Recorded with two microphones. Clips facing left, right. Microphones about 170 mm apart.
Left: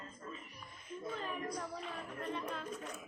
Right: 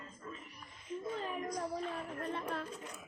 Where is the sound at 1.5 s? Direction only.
40° right (ahead or behind).